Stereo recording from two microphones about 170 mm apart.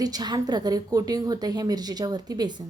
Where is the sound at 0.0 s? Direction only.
25° right (ahead or behind).